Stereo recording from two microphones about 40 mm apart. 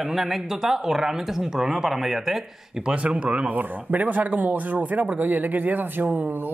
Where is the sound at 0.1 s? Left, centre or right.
Centre.